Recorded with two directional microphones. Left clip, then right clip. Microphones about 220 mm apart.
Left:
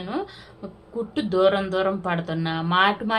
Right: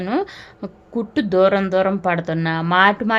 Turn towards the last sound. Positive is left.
turn(degrees=-40)  # may be behind; listen again after turning